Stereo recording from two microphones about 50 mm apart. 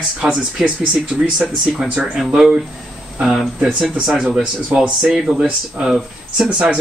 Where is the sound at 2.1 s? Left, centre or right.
Centre.